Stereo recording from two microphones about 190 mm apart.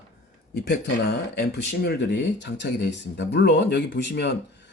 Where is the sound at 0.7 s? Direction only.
60° left (ahead or behind).